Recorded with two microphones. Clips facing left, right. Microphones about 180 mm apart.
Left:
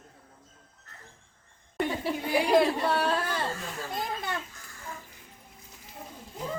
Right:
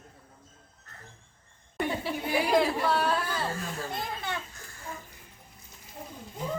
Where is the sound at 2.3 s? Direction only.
5° right (ahead or behind).